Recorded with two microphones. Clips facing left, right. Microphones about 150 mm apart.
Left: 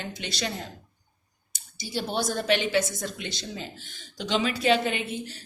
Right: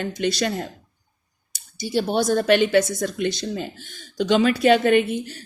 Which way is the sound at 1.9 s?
55° right (ahead or behind).